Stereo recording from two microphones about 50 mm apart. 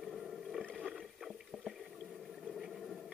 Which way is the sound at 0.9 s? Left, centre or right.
Centre.